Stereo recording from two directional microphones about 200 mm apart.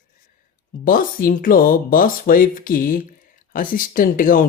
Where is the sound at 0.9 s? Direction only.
45° left (ahead or behind).